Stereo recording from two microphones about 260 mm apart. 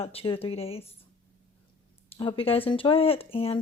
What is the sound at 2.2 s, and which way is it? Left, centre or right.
Speech, left.